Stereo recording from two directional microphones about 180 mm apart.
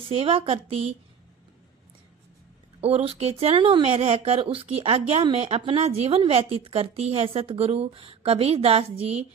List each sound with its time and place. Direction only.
0.0 s speech: 30° right (ahead or behind)
2.8 s speech: 35° right (ahead or behind)